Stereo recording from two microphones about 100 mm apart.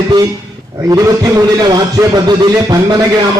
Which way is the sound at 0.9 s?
35° right (ahead or behind).